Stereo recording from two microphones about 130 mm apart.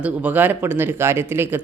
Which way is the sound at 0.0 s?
15° right (ahead or behind).